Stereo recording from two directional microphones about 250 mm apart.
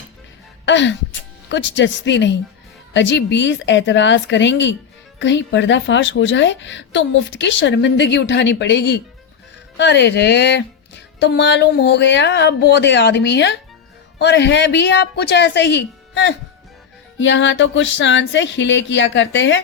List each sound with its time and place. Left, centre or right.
0.6 s speech: left